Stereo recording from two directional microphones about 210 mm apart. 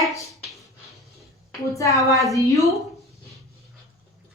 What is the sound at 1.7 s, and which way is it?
Speech, 15° left (ahead or behind).